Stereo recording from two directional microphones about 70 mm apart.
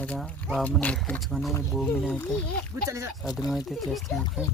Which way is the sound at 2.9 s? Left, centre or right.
Right.